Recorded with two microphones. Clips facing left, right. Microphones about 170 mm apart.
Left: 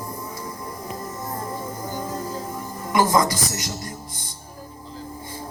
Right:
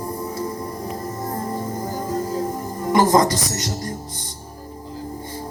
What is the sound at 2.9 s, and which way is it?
Speech, 35° right (ahead or behind).